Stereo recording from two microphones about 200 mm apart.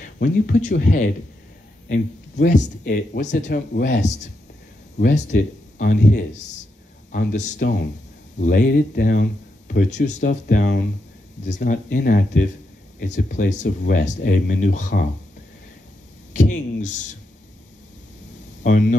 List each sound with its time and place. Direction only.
0.2 s speech: 45° left (ahead or behind)
3.4 s speech: 50° left (ahead or behind)
4.9 s speech: 35° left (ahead or behind)
7.5 s speech: 55° left (ahead or behind)
8.4 s speech: 40° left (ahead or behind)
10.0 s speech: 40° left (ahead or behind)
16.3 s speech: 40° left (ahead or behind)
18.6 s speech: 40° left (ahead or behind)